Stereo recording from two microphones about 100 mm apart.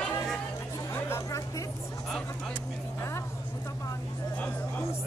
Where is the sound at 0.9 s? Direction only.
25° left (ahead or behind).